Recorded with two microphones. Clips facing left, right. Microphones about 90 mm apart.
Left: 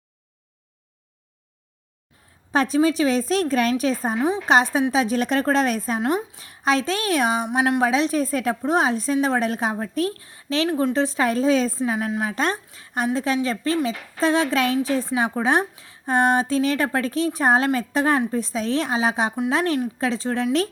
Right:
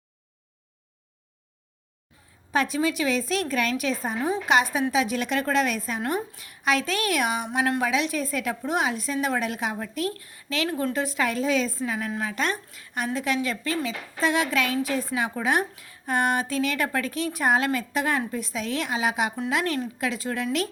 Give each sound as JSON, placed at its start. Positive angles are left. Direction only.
{"t": 2.5, "sound": "a woman's voice", "side_deg": 35}
{"t": 6.0, "sound": "speech", "side_deg": 20}
{"t": 6.4, "sound": "a woman's voice", "side_deg": 35}
{"t": 12.3, "sound": "a woman's voice", "side_deg": 35}